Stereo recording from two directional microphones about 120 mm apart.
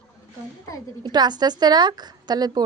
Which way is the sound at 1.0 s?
35° right (ahead or behind).